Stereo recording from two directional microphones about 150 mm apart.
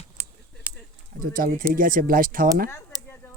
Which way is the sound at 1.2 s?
70° right (ahead or behind).